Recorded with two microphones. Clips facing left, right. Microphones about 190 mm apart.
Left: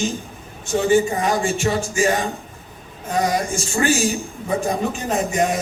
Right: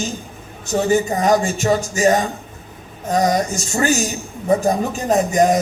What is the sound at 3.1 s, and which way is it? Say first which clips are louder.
Speech: right 3 dB; 35° right (ahead or behind).